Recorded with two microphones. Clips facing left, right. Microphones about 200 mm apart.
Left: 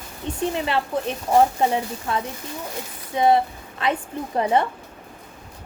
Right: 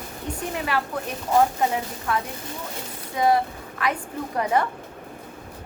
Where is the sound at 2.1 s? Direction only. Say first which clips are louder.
Right 1 dB; 25° left (ahead or behind).